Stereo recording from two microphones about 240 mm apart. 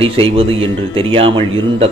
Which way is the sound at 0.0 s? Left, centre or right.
Right.